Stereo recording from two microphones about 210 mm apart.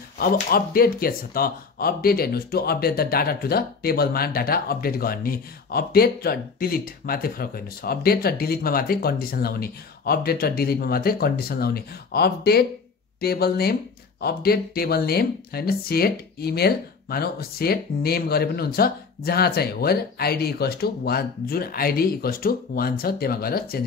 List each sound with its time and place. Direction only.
0.2 s speech: 45° left (ahead or behind)